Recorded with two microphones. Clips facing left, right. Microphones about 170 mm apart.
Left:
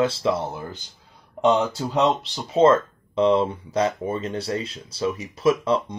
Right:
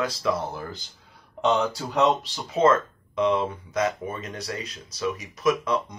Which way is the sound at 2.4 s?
30° left (ahead or behind).